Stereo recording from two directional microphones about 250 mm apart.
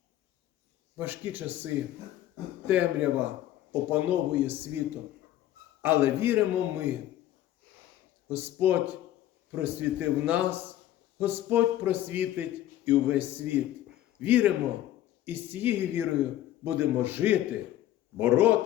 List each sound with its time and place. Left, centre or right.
0.9 s speech: centre
5.8 s speech: centre
8.3 s speech: centre